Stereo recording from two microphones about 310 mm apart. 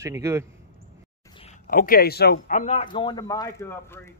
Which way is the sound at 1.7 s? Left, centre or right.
Left.